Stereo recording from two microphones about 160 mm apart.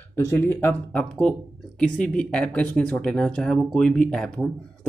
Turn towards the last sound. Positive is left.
turn(degrees=5)  # may be behind; listen again after turning